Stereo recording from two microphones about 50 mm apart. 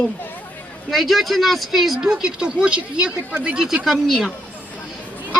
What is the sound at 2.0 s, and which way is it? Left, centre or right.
Speech, centre.